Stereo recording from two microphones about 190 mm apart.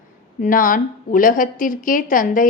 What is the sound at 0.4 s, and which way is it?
A woman's voice, 45° left (ahead or behind).